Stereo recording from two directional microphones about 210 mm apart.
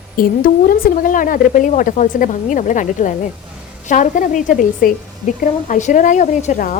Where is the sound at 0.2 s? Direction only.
40° left (ahead or behind).